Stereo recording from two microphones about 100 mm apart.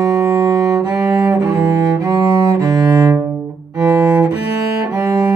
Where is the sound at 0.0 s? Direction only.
35° right (ahead or behind).